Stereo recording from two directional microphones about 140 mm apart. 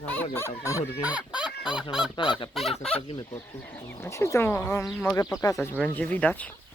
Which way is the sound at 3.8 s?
20° left (ahead or behind).